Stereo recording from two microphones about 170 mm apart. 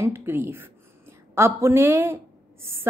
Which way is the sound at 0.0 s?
15° right (ahead or behind).